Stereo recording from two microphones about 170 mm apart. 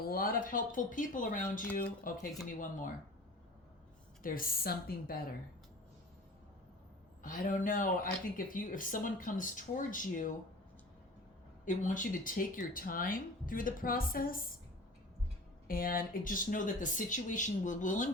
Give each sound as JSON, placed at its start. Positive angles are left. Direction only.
{"t": 0.0, "sound": "speech", "side_deg": 60}
{"t": 4.2, "sound": "speech", "side_deg": 55}
{"t": 7.2, "sound": "speech", "side_deg": 50}
{"t": 11.6, "sound": "speech", "side_deg": 50}
{"t": 15.6, "sound": "speech", "side_deg": 55}